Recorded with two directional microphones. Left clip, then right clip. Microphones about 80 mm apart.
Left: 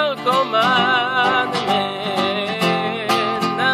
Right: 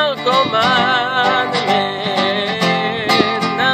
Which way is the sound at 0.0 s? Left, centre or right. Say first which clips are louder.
Right 3 dB; right.